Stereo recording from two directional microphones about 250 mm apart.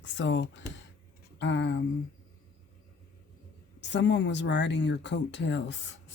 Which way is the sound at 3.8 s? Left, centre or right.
Left.